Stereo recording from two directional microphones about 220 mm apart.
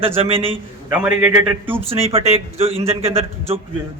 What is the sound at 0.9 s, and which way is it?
Speech, 5° right (ahead or behind).